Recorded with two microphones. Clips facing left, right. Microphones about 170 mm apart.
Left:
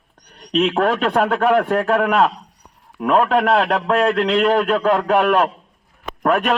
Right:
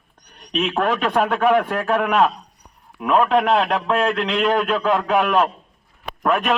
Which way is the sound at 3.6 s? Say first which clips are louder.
Left 2 dB; 40° left (ahead or behind).